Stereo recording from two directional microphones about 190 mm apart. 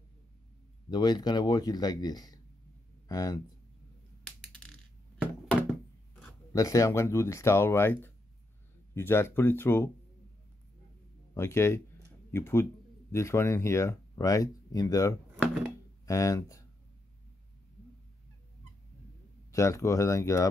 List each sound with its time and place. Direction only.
0.8 s speech: 25° left (ahead or behind)
6.5 s speech: 15° left (ahead or behind)
11.3 s speech: 15° left (ahead or behind)
19.5 s speech: 15° left (ahead or behind)